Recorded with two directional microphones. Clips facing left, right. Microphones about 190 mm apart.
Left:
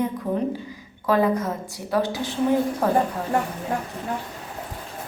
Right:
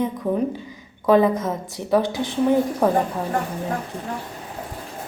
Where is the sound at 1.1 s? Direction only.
20° right (ahead or behind).